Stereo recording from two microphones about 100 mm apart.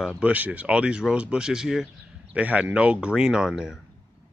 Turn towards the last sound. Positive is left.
turn(degrees=-5)  # may be behind; listen again after turning